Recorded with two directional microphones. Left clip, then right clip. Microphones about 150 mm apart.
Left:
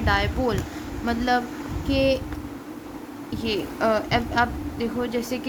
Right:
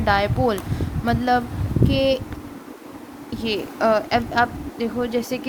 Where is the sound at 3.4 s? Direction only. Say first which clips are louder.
Right 3 dB; 30° right (ahead or behind).